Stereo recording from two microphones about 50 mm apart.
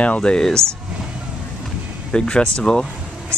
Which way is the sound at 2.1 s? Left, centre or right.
Centre.